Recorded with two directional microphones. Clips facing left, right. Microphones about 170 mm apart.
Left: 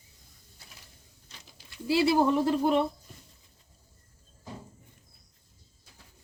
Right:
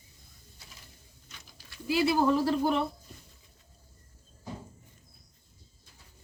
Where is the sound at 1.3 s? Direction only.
25° left (ahead or behind).